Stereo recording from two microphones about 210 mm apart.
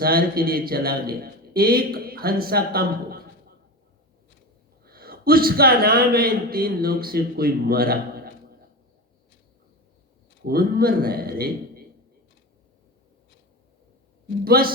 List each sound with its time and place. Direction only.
0.0 s a man's voice: 45° right (ahead or behind)
4.9 s a man's voice: 45° right (ahead or behind)
10.4 s a man's voice: 45° right (ahead or behind)
14.4 s a man's voice: 45° right (ahead or behind)